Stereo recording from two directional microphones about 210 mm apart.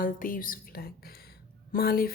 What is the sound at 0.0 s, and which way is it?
A woman's voice, 40° left (ahead or behind).